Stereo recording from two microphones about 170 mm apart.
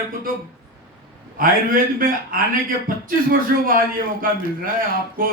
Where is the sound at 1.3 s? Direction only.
55° right (ahead or behind).